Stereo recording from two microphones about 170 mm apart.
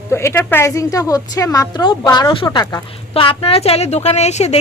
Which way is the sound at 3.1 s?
30° left (ahead or behind).